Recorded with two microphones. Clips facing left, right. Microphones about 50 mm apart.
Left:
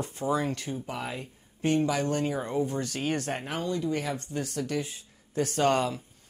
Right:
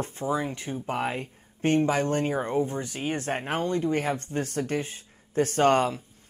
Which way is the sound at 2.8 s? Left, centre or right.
Centre.